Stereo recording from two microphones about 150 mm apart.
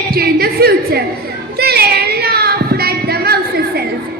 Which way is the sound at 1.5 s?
90° right.